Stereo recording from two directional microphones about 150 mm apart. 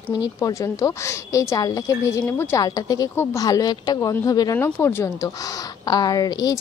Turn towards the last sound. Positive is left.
turn(degrees=25)  # may be behind; listen again after turning